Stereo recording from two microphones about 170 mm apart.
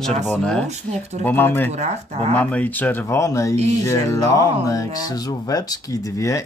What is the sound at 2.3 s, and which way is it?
Speech, 10° left (ahead or behind).